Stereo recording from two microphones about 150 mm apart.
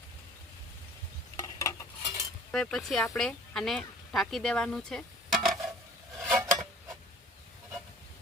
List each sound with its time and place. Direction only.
1.4 s cutlery: 20° left (ahead or behind)
2.5 s a woman's voice: 5° left (ahead or behind)
6.2 s dishes: centre (ahead or behind)